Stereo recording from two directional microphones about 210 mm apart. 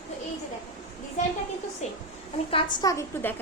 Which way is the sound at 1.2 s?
35° left (ahead or behind).